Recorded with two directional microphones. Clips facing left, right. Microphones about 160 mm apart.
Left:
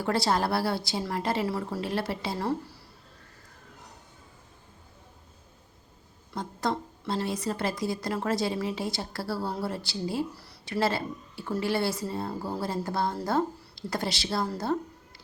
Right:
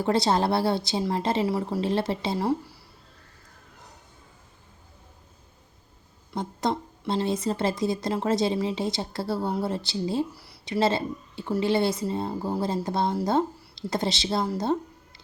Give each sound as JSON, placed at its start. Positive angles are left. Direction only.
{"t": 0.0, "sound": "a woman's voice", "side_deg": -20}
{"t": 1.5, "sound": "speech", "side_deg": -15}
{"t": 1.8, "sound": "a woman's voice", "side_deg": -25}
{"t": 2.4, "sound": "speech", "side_deg": -10}
{"t": 6.3, "sound": "a woman's voice", "side_deg": -25}
{"t": 10.3, "sound": "a sound", "side_deg": -10}
{"t": 10.8, "sound": "a woman's voice", "side_deg": -20}